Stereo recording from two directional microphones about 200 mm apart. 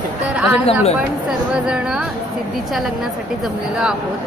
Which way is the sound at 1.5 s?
5° right (ahead or behind).